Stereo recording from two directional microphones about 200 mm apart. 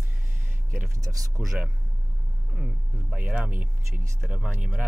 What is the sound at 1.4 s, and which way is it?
Speech, centre (ahead or behind).